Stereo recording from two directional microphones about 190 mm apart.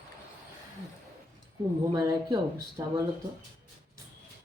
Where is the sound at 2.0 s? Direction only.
20° right (ahead or behind).